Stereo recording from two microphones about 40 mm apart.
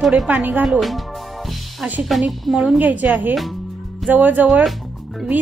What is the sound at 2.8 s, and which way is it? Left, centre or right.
A woman's voice, right.